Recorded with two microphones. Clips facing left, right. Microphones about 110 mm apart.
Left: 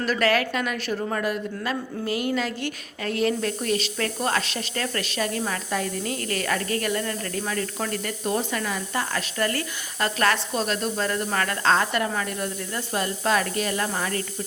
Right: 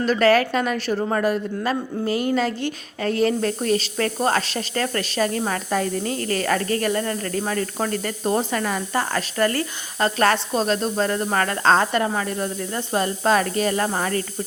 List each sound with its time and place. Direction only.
0.0 s a woman's voice: 30° right (ahead or behind)